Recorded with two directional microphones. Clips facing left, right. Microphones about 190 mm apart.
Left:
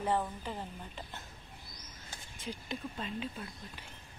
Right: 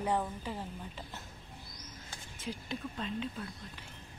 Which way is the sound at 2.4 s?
Centre (ahead or behind).